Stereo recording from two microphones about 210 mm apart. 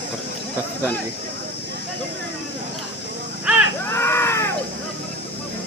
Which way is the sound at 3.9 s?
10° left (ahead or behind).